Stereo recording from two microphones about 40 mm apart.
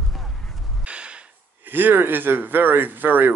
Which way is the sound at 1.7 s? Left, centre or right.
Right.